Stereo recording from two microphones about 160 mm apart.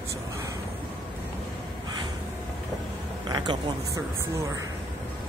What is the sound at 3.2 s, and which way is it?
Speech, 25° right (ahead or behind).